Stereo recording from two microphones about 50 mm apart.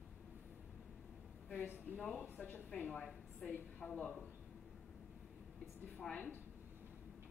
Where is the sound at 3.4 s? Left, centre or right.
Left.